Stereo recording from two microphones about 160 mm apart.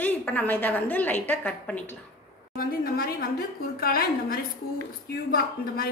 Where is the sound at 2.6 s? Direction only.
65° left (ahead or behind).